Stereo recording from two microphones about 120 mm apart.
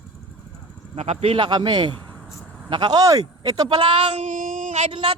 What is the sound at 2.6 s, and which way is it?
Speech, 40° right (ahead or behind).